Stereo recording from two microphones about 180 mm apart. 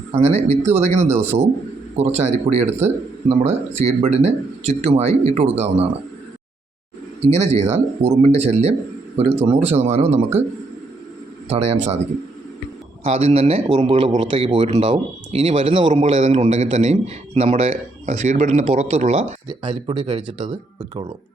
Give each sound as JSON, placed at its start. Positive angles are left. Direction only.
{"t": 0.1, "sound": "a man's voice", "side_deg": -35}
{"t": 7.2, "sound": "a man's voice", "side_deg": -35}
{"t": 11.4, "sound": "a man's voice", "side_deg": -35}
{"t": 13.2, "sound": "a man's voice", "side_deg": -35}
{"t": 19.5, "sound": "speech", "side_deg": -25}